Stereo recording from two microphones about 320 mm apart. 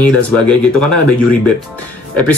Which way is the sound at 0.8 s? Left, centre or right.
Right.